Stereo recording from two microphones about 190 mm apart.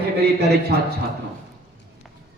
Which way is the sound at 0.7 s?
60° right (ahead or behind).